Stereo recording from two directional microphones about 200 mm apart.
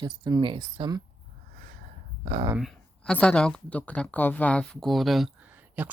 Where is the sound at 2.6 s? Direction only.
Centre (ahead or behind).